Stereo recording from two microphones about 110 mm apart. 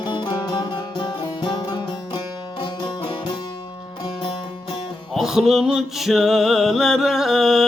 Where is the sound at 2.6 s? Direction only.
50° left (ahead or behind).